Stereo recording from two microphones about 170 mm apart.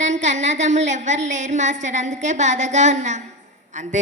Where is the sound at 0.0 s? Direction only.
45° right (ahead or behind).